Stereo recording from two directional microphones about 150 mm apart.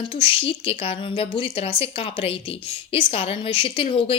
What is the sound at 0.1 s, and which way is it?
A woman's voice, 35° left (ahead or behind).